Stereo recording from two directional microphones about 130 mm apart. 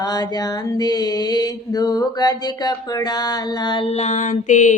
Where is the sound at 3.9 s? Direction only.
60° left (ahead or behind).